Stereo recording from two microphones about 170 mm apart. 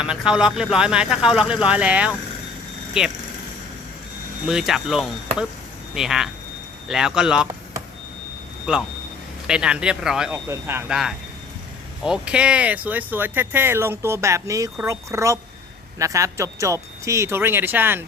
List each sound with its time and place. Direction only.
0.0 s speech: 5° right (ahead or behind)
4.4 s speech: centre (ahead or behind)
9.5 s speech: 5° right (ahead or behind)
10.3 s speech: 15° right (ahead or behind)
12.0 s speech: 5° right (ahead or behind)